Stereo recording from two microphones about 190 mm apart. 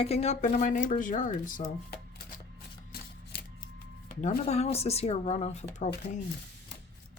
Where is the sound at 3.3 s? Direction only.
60° left (ahead or behind).